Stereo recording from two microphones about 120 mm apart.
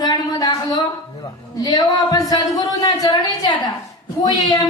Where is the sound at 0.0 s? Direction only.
35° left (ahead or behind).